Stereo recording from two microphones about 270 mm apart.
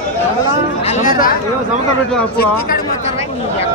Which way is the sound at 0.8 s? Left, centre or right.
Left.